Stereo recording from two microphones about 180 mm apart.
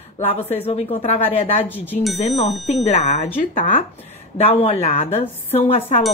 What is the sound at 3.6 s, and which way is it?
Speech, 45° left (ahead or behind).